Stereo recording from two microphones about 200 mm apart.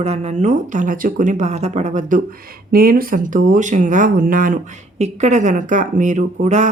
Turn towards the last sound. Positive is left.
turn(degrees=-35)  # may be behind; listen again after turning